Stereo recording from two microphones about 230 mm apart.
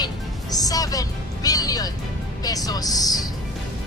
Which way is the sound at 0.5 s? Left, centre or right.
Centre.